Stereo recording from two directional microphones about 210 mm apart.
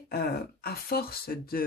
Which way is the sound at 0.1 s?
45° left (ahead or behind).